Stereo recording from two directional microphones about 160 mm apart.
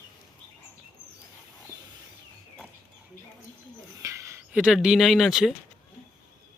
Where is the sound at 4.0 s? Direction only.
20° right (ahead or behind).